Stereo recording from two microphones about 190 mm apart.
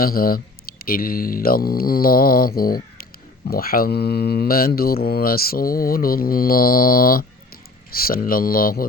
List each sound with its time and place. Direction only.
0.0 s speech: 50° left (ahead or behind)